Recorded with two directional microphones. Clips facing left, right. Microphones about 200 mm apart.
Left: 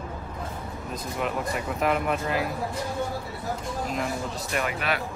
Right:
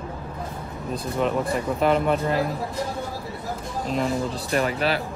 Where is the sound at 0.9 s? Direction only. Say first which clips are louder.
Right 6 dB; 30° right (ahead or behind).